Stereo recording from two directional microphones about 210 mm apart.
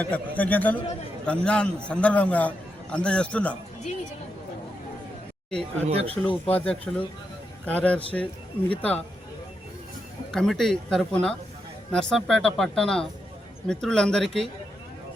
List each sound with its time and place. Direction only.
0.0 s a man's voice: 5° left (ahead or behind)
5.5 s speech: 5° left (ahead or behind)
5.9 s speech: 30° right (ahead or behind)
6.5 s a man's voice: 5° left (ahead or behind)
10.3 s speech: centre (ahead or behind)